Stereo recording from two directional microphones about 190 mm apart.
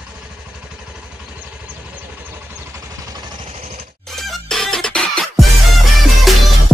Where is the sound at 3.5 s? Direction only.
35° right (ahead or behind).